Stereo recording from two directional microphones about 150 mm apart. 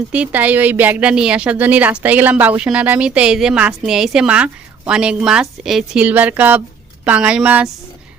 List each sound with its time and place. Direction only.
0.1 s a woman's voice: 10° right (ahead or behind)